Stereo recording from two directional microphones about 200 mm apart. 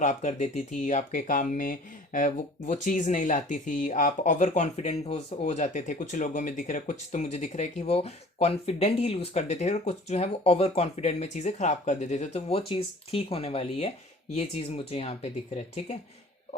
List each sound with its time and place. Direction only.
0.0 s speech: 35° left (ahead or behind)
2.7 s speech: 40° left (ahead or behind)